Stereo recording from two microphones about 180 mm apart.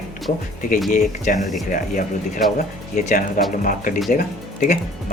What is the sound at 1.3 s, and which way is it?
Speech, 50° left (ahead or behind).